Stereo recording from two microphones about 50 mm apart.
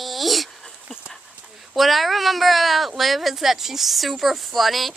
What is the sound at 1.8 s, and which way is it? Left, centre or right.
Speech, centre.